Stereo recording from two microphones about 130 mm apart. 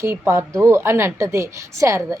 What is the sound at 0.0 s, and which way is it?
A woman's voice, 20° right (ahead or behind).